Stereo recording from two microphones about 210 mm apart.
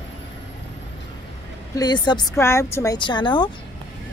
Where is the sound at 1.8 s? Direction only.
20° left (ahead or behind).